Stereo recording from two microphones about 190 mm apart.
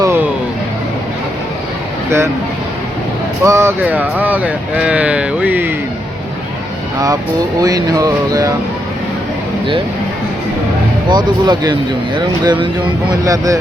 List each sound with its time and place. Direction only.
0.0 s music: 15° right (ahead or behind)
2.0 s speech: 15° right (ahead or behind)
3.4 s speech: 15° right (ahead or behind)
7.6 s speech: 20° right (ahead or behind)
11.1 s speech: 20° right (ahead or behind)